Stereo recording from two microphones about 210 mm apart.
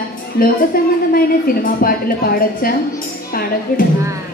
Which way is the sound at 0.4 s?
45° left (ahead or behind).